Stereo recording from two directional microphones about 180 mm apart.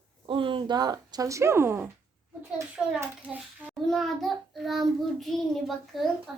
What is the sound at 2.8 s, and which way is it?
Child singing, 5° right (ahead or behind).